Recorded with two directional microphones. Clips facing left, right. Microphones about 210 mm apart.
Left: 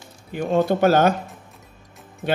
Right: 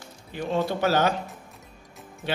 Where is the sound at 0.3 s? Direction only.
50° left (ahead or behind).